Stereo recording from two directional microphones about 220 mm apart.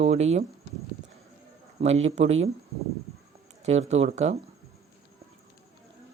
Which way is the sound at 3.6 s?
30° right (ahead or behind).